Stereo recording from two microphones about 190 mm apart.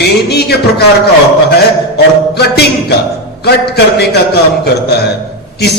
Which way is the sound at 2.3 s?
60° left (ahead or behind).